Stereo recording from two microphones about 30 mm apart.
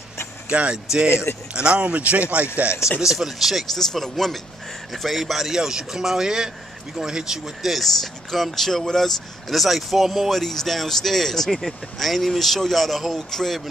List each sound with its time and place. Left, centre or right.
0.5 s speech: right
3.2 s speech: centre
3.7 s speech: centre
4.9 s speech: centre
7.7 s speech: centre
10.3 s speech: centre